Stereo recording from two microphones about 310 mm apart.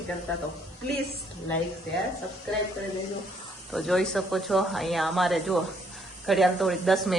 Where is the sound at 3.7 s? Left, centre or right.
Centre.